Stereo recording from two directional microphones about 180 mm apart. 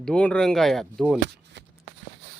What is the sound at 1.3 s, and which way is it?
Shuffling cards, 75° right (ahead or behind).